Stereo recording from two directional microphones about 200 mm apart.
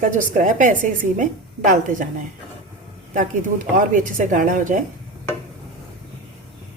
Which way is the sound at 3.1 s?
40° right (ahead or behind).